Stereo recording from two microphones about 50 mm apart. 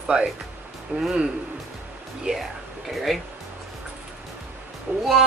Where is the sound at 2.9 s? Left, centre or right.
Centre.